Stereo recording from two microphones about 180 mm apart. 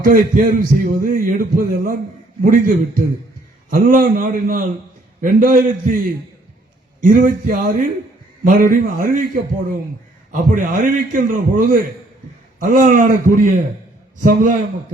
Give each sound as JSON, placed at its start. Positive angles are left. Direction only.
{"t": 0.0, "sound": "a man's voice", "side_deg": -50}
{"t": 7.0, "sound": "a man's voice", "side_deg": -50}